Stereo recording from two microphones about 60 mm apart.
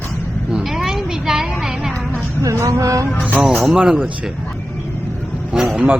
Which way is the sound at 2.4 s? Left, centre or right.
Right.